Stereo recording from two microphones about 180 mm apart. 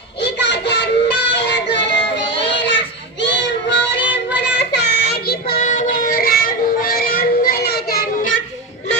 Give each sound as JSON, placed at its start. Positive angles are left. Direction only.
{"t": 0.2, "sound": "child singing", "side_deg": 70}
{"t": 4.5, "sound": "child singing", "side_deg": 70}
{"t": 5.5, "sound": "music", "side_deg": 45}